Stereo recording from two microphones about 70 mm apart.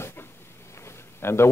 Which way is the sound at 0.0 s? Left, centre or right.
Left.